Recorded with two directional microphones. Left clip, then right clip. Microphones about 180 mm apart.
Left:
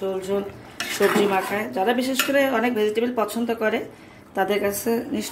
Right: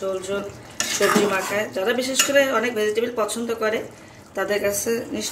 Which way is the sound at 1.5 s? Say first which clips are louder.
Even; 55° left (ahead or behind).